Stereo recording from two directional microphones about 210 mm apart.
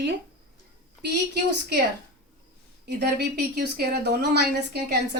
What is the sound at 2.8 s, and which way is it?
Speech, 50° right (ahead or behind).